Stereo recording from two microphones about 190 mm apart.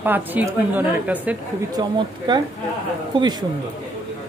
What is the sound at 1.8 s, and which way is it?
Speech, 25° right (ahead or behind).